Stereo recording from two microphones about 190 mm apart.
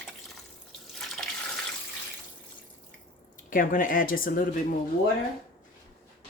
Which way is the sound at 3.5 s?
45° left (ahead or behind).